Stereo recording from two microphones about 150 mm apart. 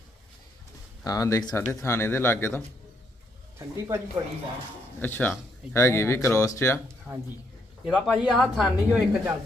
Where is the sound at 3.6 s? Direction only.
20° right (ahead or behind).